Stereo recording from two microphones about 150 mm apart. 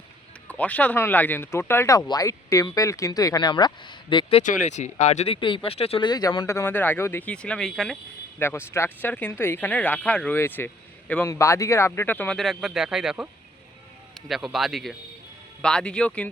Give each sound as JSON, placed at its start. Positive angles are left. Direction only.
{"t": 0.4, "sound": "speech", "side_deg": 10}
{"t": 4.4, "sound": "speech", "side_deg": 50}
{"t": 6.1, "sound": "speech", "side_deg": 25}
{"t": 8.4, "sound": "speech", "side_deg": 15}
{"t": 14.3, "sound": "speech", "side_deg": 0}